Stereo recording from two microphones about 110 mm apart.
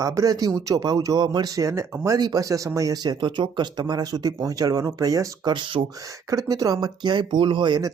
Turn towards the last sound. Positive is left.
turn(degrees=-45)  # may be behind; listen again after turning